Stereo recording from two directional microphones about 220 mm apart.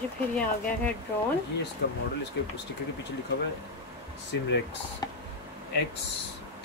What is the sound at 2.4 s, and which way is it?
Speech, 50° left (ahead or behind).